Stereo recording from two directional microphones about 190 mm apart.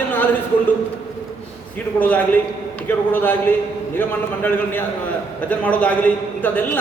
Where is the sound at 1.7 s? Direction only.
10° left (ahead or behind).